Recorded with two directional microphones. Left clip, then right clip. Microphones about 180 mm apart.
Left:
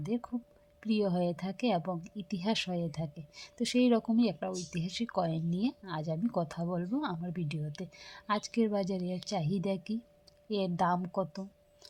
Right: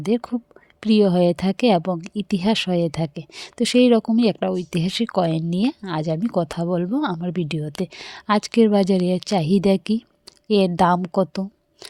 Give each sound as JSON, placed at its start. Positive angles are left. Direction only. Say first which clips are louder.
{"t": 0.0, "sound": "speech", "louder": "right 14 dB", "side_deg": -45}